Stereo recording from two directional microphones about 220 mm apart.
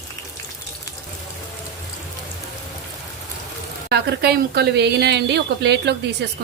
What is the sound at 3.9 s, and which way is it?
A woman's voice, 45° right (ahead or behind).